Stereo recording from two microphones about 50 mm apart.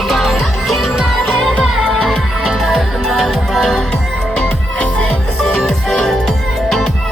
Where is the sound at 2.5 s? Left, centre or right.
Centre.